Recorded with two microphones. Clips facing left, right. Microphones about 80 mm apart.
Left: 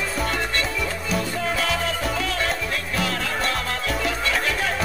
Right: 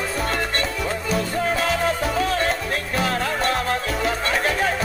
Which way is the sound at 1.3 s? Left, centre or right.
Right.